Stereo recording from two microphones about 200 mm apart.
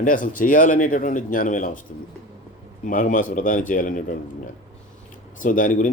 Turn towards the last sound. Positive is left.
turn(degrees=40)  # may be behind; listen again after turning